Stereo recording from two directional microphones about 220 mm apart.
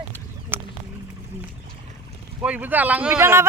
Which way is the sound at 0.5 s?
10° right (ahead or behind).